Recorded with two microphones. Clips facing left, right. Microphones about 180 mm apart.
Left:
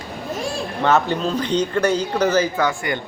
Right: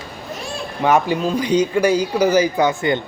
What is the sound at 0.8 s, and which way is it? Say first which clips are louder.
Speech: right 2 dB; 10° right (ahead or behind).